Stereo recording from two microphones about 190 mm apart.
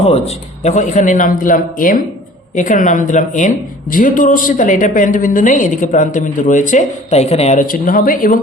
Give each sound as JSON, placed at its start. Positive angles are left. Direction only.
{"t": 0.0, "sound": "a man's voice", "side_deg": 35}